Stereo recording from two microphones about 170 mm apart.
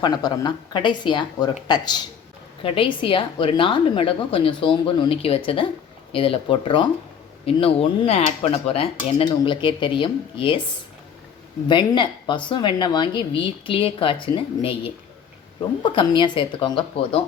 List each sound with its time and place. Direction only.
0.0 s speech: 25° left (ahead or behind)
11.7 s speech: 25° left (ahead or behind)